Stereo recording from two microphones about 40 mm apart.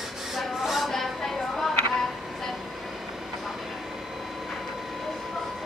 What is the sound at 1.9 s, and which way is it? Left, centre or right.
Music, centre.